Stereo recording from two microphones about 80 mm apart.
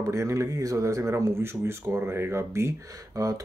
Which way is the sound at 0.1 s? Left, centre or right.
Right.